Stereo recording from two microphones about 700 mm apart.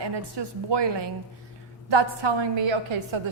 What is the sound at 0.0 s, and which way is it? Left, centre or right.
A woman's voice, right.